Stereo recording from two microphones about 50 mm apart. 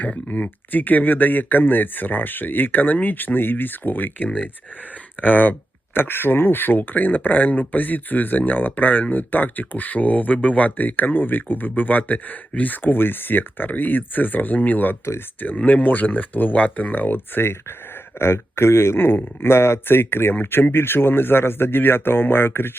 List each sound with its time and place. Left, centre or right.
0.3 s speech: left